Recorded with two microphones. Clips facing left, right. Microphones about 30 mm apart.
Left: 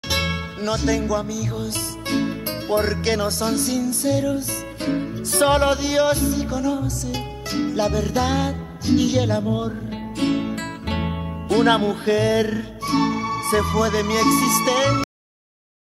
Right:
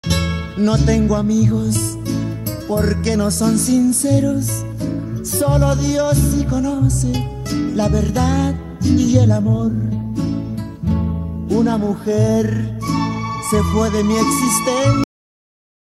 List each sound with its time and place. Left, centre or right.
0.1 s music: centre
1.5 s music: centre
2.9 s music: left
4.8 s music: left
5.7 s music: left
6.1 s music: centre
7.0 s music: centre
7.4 s music: centre; by 9.9 s left
10.1 s music: left
12.4 s music: left
13.7 s music: centre